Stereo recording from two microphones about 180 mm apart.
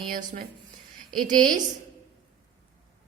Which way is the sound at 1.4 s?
45° right (ahead or behind).